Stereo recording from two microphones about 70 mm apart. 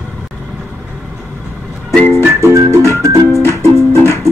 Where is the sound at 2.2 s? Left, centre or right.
Right.